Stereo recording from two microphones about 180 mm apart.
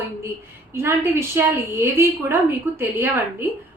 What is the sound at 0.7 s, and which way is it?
A woman's voice, 15° right (ahead or behind).